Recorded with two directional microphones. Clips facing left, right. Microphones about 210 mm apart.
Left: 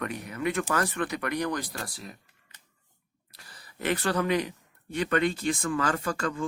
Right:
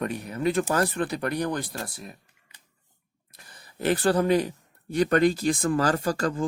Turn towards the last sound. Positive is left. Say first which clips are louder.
# right 4 dB
turn(degrees=-35)  # may be behind; listen again after turning